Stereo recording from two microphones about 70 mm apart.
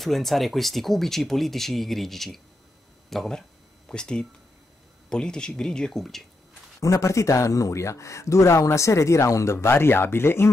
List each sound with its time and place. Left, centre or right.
0.0 s speech: centre
6.8 s speech: left